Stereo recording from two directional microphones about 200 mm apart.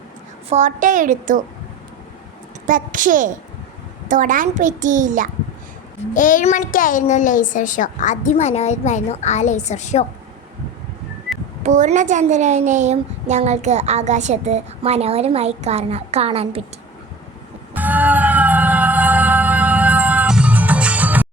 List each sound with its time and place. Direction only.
0.5 s a woman's voice: 40° right (ahead or behind)
2.6 s a woman's voice: 40° right (ahead or behind)
6.1 s a woman's voice: 40° left (ahead or behind)
11.6 s a woman's voice: 35° right (ahead or behind)
17.7 s music: 10° right (ahead or behind)